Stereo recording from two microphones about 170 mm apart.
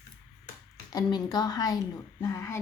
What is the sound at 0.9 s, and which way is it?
Speech, 25° left (ahead or behind).